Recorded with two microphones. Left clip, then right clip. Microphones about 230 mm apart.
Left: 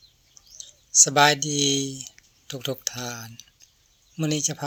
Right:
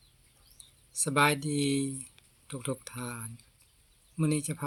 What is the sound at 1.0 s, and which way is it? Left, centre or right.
Speech, centre.